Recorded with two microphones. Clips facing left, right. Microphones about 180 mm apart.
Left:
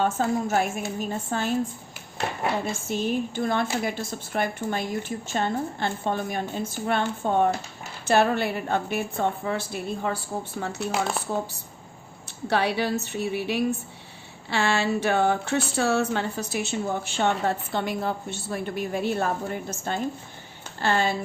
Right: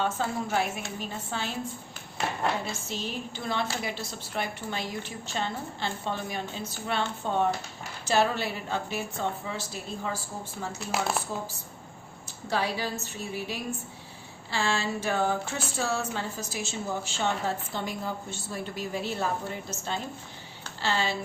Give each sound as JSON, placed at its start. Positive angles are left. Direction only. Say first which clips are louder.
{"t": 0.0, "sound": "speech", "louder": "left 5 dB", "side_deg": 45}
{"t": 2.8, "sound": "a woman's voice", "louder": "left 9 dB", "side_deg": 50}
{"t": 12.5, "sound": "a woman's voice", "louder": "left 5 dB", "side_deg": 65}